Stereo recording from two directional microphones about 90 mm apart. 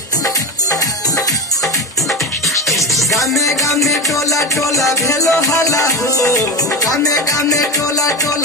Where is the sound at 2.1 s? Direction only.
Centre (ahead or behind).